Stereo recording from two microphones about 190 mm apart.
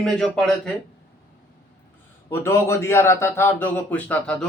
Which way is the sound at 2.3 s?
15° left (ahead or behind).